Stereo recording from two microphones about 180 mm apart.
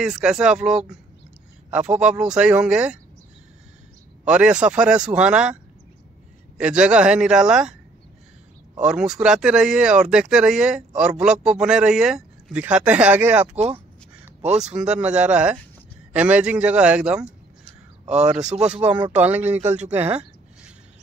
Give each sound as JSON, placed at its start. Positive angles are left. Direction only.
{"t": 0.0, "sound": "speech", "side_deg": -5}
{"t": 4.2, "sound": "speech", "side_deg": -5}
{"t": 6.6, "sound": "speech", "side_deg": -5}
{"t": 8.8, "sound": "speech", "side_deg": -5}
{"t": 14.4, "sound": "speech", "side_deg": -40}
{"t": 14.7, "sound": "a man's voice", "side_deg": -5}
{"t": 18.0, "sound": "speech", "side_deg": -40}
{"t": 19.1, "sound": "a man's voice", "side_deg": -10}
{"t": 19.6, "sound": "speech", "side_deg": -40}
{"t": 19.9, "sound": "a sound", "side_deg": -10}